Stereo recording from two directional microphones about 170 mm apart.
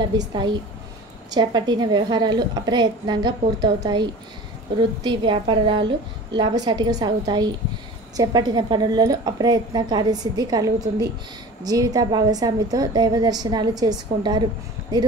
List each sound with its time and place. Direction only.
0.3 s a woman's voice: 25° right (ahead or behind)